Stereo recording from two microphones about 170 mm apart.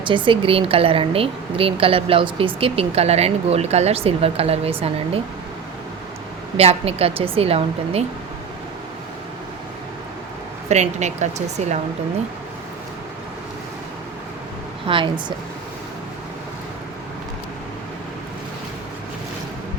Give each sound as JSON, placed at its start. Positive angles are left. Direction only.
{"t": 0.0, "sound": "a woman's voice", "side_deg": -30}
{"t": 6.6, "sound": "a woman's voice", "side_deg": -35}
{"t": 10.7, "sound": "a woman's voice", "side_deg": -40}
{"t": 14.8, "sound": "speech", "side_deg": -30}